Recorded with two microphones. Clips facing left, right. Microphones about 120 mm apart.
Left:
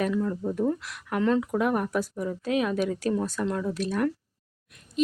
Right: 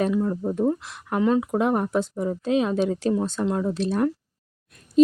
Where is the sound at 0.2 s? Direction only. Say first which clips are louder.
Right 3 dB; 40° right (ahead or behind).